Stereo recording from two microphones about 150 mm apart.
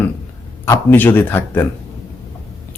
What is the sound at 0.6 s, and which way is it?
A man's voice, 15° left (ahead or behind).